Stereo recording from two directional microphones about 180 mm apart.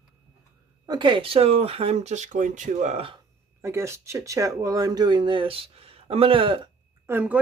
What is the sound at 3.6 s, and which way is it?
Speech, 15° right (ahead or behind).